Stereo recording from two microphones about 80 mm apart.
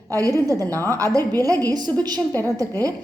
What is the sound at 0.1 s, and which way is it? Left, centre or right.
A woman's voice, right.